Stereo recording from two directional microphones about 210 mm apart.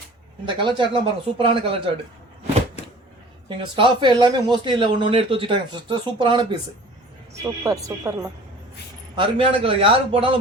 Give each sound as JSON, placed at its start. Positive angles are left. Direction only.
{"t": 0.4, "sound": "speech", "side_deg": -25}
{"t": 3.6, "sound": "speech", "side_deg": -25}
{"t": 9.1, "sound": "speech", "side_deg": -25}